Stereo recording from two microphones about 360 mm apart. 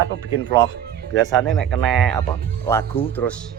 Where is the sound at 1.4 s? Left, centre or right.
Centre.